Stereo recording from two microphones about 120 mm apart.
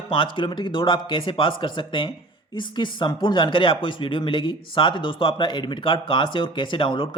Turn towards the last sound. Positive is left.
turn(degrees=45)  # may be behind; listen again after turning